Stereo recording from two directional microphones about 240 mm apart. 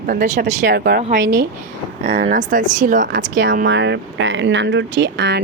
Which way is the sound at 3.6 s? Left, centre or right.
Right.